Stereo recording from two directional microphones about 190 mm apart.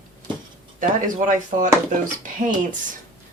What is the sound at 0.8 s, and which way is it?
Speech, 45° right (ahead or behind).